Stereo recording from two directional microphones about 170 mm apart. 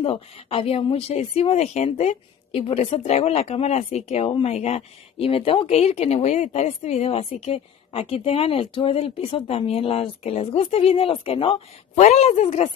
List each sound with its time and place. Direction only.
0.0 s speech: 35° left (ahead or behind)